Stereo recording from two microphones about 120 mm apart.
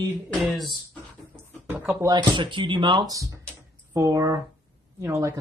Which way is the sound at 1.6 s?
15° right (ahead or behind).